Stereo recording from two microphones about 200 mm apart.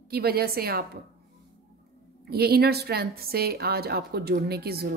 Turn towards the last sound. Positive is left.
turn(degrees=-50)  # may be behind; listen again after turning